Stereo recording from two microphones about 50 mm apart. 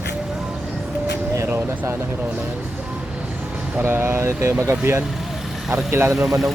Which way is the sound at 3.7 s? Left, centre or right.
Right.